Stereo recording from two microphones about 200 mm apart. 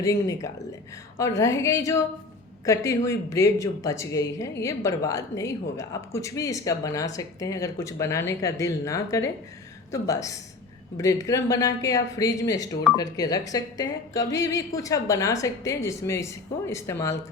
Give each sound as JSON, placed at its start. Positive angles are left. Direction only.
{"t": 0.0, "sound": "speech", "side_deg": 15}